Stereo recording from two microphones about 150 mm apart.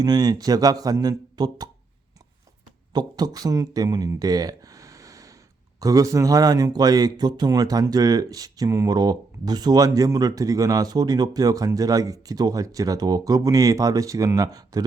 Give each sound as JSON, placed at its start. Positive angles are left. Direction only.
{"t": 0.0, "sound": "a man's voice", "side_deg": -25}
{"t": 2.9, "sound": "a man's voice", "side_deg": -30}